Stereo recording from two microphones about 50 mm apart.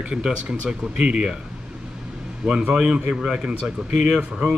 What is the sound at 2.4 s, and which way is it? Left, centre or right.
A man's voice, right.